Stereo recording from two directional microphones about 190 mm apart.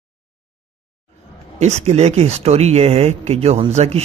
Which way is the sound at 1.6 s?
35° right (ahead or behind).